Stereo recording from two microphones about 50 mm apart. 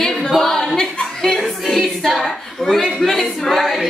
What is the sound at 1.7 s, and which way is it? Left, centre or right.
A woman's voice, centre.